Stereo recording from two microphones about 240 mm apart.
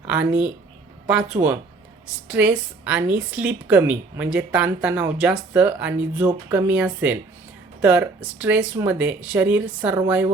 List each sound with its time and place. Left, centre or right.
0.1 s a woman's voice: centre